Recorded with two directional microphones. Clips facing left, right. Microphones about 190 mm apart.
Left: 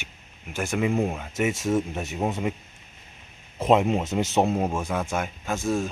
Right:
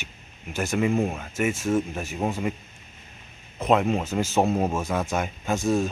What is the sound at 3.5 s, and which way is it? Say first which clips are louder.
Speech: left 1 dB; 25° left (ahead or behind).